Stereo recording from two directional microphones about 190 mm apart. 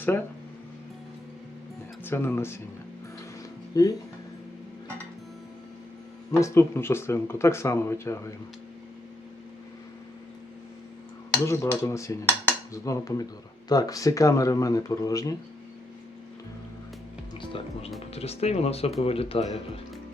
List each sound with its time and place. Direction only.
2.0 s speech: 10° left (ahead or behind)
3.7 s speech: 20° left (ahead or behind)
6.3 s speech: 15° left (ahead or behind)
11.4 s speech: 15° left (ahead or behind)
17.3 s music: 25° left (ahead or behind)
18.1 s speech: 35° left (ahead or behind)